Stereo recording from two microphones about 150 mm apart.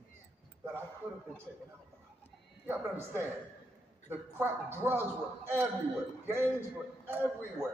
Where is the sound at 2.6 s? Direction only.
15° right (ahead or behind).